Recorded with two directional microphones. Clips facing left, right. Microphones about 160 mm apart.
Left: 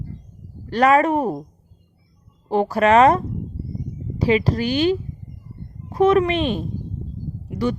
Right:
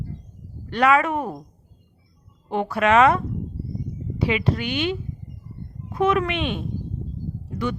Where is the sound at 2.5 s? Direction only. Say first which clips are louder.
Left 4 dB; 35° left (ahead or behind).